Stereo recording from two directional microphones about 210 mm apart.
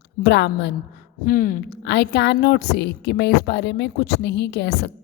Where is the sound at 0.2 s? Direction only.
55° left (ahead or behind).